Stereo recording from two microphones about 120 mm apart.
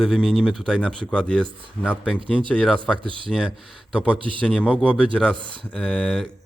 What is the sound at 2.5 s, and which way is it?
Speech, 5° left (ahead or behind).